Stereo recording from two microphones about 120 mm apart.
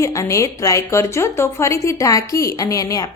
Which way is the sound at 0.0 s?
25° left (ahead or behind).